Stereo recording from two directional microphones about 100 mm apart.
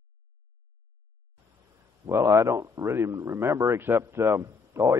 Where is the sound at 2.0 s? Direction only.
25° right (ahead or behind).